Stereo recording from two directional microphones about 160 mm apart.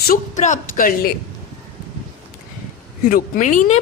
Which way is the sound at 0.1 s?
50° left (ahead or behind).